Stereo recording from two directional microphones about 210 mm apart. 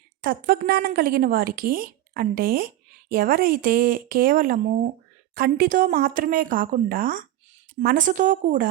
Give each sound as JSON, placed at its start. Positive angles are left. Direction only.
{"t": 0.2, "sound": "a woman's voice", "side_deg": -45}